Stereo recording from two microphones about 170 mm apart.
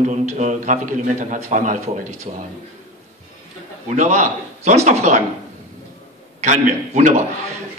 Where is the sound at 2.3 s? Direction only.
35° right (ahead or behind).